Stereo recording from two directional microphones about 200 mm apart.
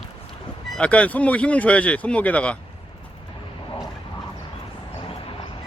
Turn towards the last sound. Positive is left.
turn(degrees=25)  # may be behind; listen again after turning